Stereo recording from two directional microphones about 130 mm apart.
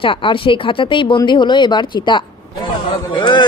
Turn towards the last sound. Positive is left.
turn(degrees=35)  # may be behind; listen again after turning